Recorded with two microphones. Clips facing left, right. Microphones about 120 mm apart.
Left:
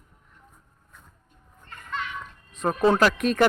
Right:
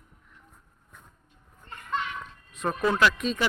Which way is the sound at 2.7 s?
30° left (ahead or behind).